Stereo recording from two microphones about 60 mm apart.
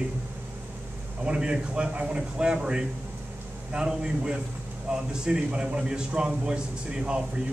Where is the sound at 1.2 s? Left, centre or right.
Centre.